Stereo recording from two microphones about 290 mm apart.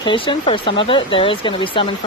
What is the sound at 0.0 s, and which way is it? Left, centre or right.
Speech, centre.